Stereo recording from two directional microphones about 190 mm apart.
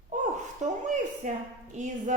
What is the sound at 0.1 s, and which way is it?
Gasp, 40° right (ahead or behind).